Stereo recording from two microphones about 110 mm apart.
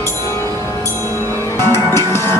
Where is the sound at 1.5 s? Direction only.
20° left (ahead or behind).